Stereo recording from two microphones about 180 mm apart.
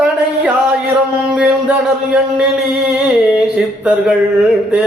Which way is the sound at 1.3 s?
5° right (ahead or behind).